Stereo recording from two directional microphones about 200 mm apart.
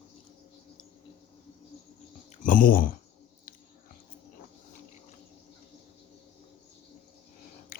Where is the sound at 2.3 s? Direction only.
45° left (ahead or behind).